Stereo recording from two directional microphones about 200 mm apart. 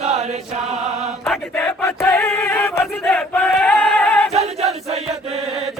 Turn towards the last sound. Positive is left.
turn(degrees=-30)  # may be behind; listen again after turning